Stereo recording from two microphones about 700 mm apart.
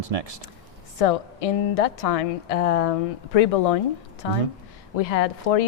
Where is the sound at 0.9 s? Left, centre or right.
Left.